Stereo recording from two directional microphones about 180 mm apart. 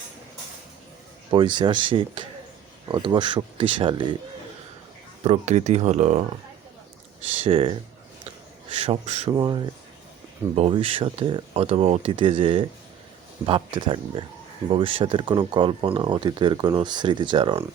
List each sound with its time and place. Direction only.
1.3 s speech: 25° right (ahead or behind)
5.2 s speech: 35° right (ahead or behind)
7.4 s speech: 30° right (ahead or behind)
9.3 s speech: 25° right (ahead or behind)